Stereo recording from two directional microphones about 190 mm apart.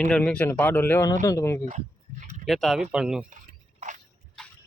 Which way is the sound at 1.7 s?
40° right (ahead or behind).